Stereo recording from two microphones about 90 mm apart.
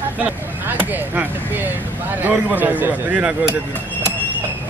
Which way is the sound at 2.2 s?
20° right (ahead or behind).